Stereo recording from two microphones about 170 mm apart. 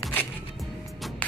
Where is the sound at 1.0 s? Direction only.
Centre (ahead or behind).